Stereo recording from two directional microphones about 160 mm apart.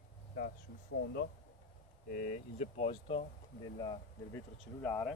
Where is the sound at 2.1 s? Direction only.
55° left (ahead or behind); by 3.2 s 40° left (ahead or behind).